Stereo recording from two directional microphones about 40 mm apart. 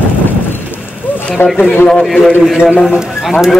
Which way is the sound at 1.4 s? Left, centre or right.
Left.